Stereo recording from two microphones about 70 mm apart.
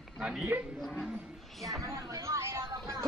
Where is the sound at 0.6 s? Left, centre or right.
Centre.